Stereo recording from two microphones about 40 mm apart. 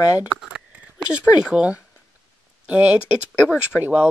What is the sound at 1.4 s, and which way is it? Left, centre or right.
Speech, right.